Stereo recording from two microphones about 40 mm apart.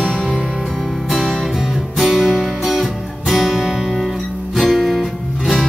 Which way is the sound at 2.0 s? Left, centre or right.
Centre.